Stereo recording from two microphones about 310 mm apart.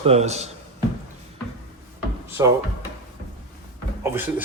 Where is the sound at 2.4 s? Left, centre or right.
Centre.